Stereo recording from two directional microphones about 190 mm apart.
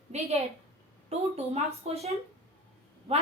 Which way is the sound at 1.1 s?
35° right (ahead or behind).